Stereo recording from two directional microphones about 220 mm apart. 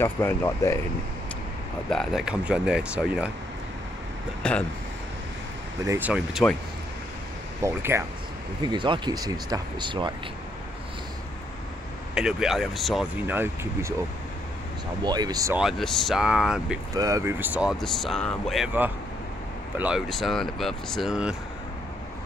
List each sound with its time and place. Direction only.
0.0 s speech: 10° left (ahead or behind)
1.9 s speech: centre (ahead or behind)
4.4 s speech: 5° left (ahead or behind)
5.9 s speech: 5° right (ahead or behind)
7.6 s speech: 10° right (ahead or behind)
12.1 s speech: 5° right (ahead or behind)
15.0 s speech: 20° right (ahead or behind)
15.6 s speech: centre (ahead or behind)
16.9 s speech: 15° right (ahead or behind)